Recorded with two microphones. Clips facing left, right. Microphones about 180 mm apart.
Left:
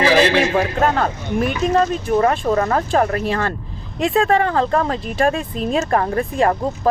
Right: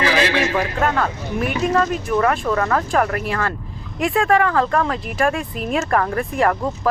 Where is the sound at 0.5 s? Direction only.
40° left (ahead or behind).